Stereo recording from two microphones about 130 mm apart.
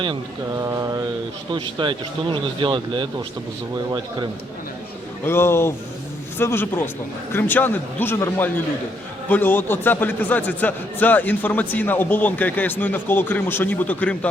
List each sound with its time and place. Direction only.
0.6 s mantra: 30° right (ahead or behind)
1.5 s speech: 40° right (ahead or behind)
5.2 s a man's voice: 20° left (ahead or behind)